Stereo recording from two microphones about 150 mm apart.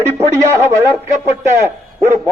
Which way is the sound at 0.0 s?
20° right (ahead or behind).